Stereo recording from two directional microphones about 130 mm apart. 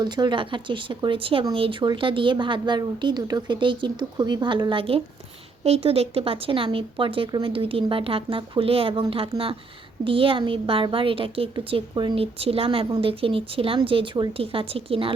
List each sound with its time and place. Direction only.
0.0 s a woman's voice: 35° right (ahead or behind)